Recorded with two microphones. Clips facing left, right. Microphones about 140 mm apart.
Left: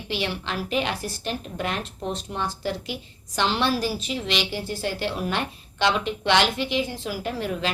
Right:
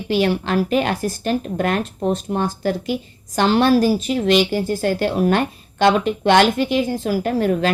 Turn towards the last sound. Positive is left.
turn(degrees=-45)  # may be behind; listen again after turning